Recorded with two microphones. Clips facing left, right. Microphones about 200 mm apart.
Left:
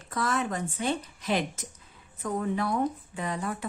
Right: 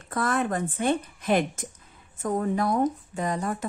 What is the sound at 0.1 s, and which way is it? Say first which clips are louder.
Speech: right 3 dB; 55° right (ahead or behind).